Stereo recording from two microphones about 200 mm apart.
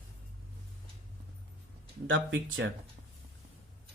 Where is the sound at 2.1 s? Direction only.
70° right (ahead or behind).